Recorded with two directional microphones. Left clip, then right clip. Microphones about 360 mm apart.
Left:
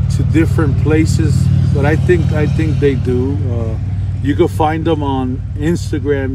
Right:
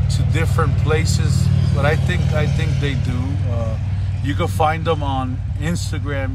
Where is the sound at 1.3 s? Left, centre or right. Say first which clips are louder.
Left 4 dB; right.